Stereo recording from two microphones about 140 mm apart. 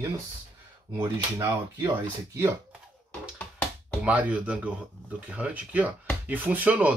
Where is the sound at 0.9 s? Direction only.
20° right (ahead or behind).